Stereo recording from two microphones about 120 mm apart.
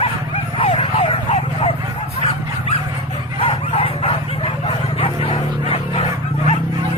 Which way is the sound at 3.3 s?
55° left (ahead or behind).